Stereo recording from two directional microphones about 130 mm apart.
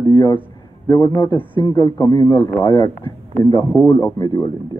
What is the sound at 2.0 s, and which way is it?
Speech, 25° left (ahead or behind).